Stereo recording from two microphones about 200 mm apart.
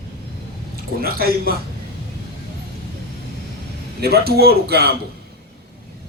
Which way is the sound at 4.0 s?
50° right (ahead or behind).